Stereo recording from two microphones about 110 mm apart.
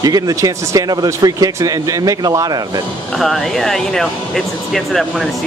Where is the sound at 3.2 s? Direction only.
Centre (ahead or behind).